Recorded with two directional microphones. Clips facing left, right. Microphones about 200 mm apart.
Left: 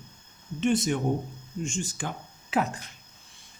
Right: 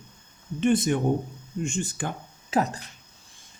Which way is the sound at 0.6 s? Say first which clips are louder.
Right 3 dB; 55° right (ahead or behind).